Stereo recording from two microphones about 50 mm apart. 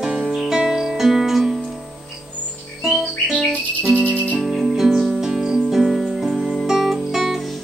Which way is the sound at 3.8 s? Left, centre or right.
Right.